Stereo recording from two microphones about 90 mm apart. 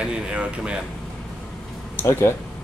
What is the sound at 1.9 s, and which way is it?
Speech, 30° left (ahead or behind).